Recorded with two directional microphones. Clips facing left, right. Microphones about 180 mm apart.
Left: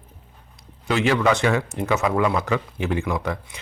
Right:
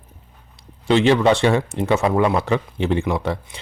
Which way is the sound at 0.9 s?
30° right (ahead or behind).